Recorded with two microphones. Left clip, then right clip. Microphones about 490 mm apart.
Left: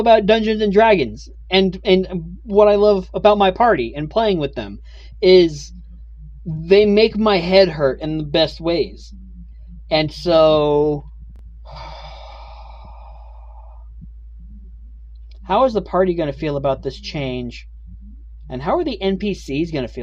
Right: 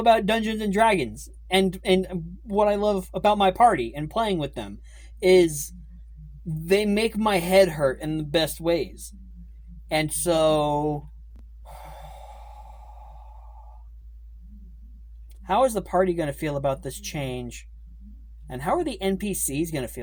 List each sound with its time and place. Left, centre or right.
0.0 s speech: right
6.7 s speech: right
11.6 s sigh: right
15.4 s speech: right